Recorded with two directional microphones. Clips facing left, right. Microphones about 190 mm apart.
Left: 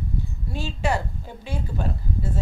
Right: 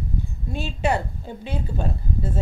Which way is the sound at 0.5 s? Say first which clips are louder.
Right 2 dB; 20° right (ahead or behind).